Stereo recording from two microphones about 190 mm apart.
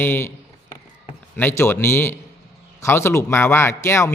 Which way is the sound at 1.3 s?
10° left (ahead or behind).